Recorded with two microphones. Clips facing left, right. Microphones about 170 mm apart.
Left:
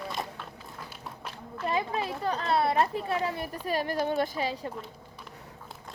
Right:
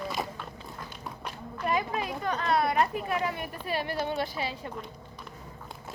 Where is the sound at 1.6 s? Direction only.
30° left (ahead or behind).